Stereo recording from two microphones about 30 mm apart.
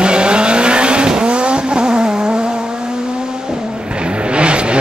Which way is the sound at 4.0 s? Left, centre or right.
Right.